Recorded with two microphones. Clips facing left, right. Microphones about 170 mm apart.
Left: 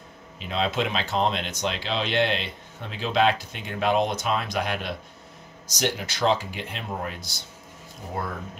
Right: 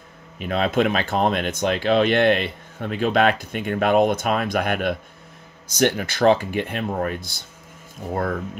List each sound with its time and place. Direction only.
0.4 s speech: 55° right (ahead or behind)